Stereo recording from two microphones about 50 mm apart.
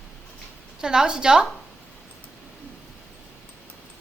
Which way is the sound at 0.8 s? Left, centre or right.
Centre.